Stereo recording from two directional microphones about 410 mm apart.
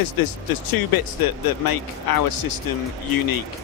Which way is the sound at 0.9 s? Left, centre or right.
Left.